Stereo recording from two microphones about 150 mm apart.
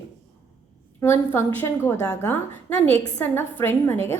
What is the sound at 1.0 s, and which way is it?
A woman's voice, 15° left (ahead or behind).